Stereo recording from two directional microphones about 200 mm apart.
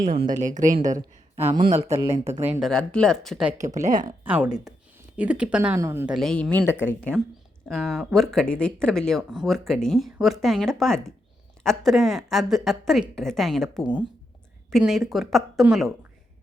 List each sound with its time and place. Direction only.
0.0 s speech: 45° right (ahead or behind)
1.5 s speech: 25° right (ahead or behind)
2.4 s speech: 5° right (ahead or behind)
6.1 s speech: 5° left (ahead or behind)
7.7 s speech: centre (ahead or behind)